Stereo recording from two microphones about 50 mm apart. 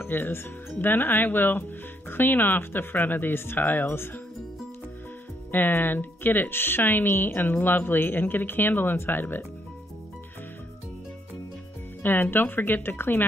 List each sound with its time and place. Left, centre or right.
0.0 s speech: left
5.5 s speech: left
12.0 s speech: left